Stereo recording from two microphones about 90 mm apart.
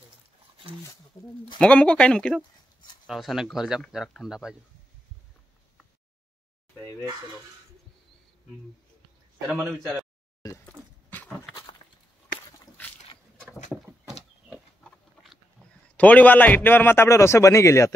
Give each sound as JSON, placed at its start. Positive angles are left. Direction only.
{"t": 1.6, "sound": "speech", "side_deg": 10}
{"t": 3.1, "sound": "speech", "side_deg": 0}
{"t": 6.8, "sound": "a man's voice", "side_deg": 25}
{"t": 10.6, "sound": "a sound", "side_deg": 20}
{"t": 16.0, "sound": "a man's voice", "side_deg": 15}